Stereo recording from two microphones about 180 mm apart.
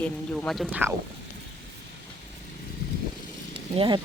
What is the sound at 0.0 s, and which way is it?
Speech, 5° left (ahead or behind).